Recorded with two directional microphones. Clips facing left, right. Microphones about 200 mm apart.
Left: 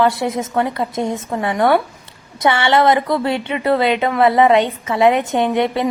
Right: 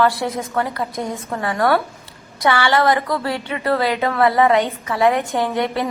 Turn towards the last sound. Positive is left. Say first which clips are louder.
# left 3 dB
turn(degrees=20)  # may be behind; listen again after turning